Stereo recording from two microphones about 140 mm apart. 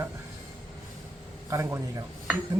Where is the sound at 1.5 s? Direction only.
20° right (ahead or behind).